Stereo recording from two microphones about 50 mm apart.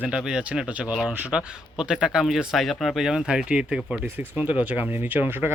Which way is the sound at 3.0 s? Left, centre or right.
Centre.